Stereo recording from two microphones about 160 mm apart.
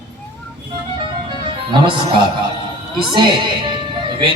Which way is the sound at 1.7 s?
30° right (ahead or behind).